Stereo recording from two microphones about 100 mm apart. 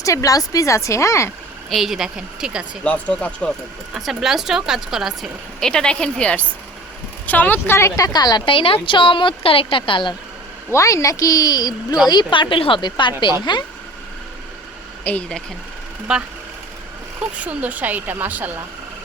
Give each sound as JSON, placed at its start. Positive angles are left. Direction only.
{"t": 0.0, "sound": "a woman's voice", "side_deg": 35}
{"t": 1.7, "sound": "a woman's voice", "side_deg": 0}
{"t": 2.8, "sound": "speech", "side_deg": 15}
{"t": 3.9, "sound": "a woman's voice", "side_deg": -5}
{"t": 8.4, "sound": "speech", "side_deg": 70}
{"t": 10.7, "sound": "a woman's voice", "side_deg": 30}
{"t": 15.0, "sound": "speech", "side_deg": 10}
{"t": 16.1, "sound": "speech", "side_deg": -10}